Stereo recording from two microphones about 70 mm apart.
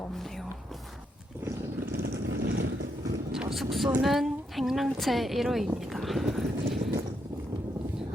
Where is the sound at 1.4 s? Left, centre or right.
Right.